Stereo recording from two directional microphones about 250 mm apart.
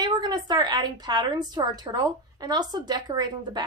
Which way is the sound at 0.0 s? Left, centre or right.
Centre.